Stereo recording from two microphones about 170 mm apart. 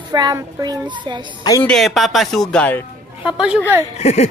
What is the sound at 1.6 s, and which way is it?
Speech, 5° left (ahead or behind).